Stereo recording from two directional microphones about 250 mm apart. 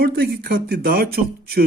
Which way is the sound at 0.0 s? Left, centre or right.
Right.